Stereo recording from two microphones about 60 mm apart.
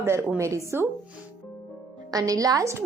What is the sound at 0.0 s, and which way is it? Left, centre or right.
Speech, right.